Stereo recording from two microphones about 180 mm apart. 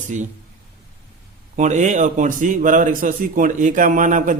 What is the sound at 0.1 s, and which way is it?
Speech, 45° right (ahead or behind).